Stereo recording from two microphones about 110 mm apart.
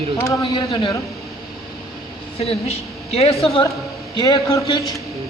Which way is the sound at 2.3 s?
70° left (ahead or behind).